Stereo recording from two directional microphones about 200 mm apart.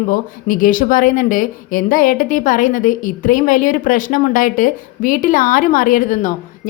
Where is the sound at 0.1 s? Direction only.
45° left (ahead or behind).